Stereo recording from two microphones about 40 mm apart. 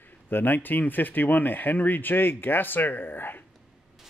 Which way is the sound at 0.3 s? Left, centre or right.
Left.